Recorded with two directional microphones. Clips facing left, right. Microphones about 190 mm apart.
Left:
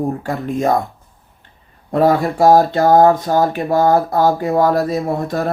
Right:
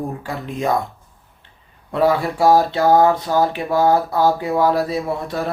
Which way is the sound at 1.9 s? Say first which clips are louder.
Left 3 dB; 45° left (ahead or behind).